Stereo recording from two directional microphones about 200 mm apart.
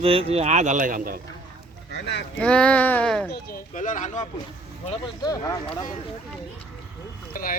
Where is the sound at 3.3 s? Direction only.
45° left (ahead or behind).